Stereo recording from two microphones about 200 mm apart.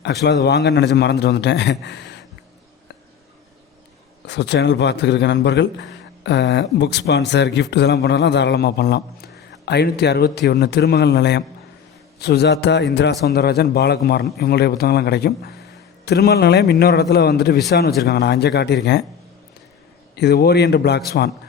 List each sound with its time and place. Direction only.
0.0 s a man's voice: 55° left (ahead or behind)
4.3 s a man's voice: 60° left (ahead or behind)
20.1 s a man's voice: 55° left (ahead or behind)